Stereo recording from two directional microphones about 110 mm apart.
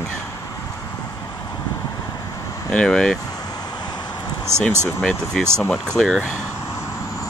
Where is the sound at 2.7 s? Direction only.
5° left (ahead or behind).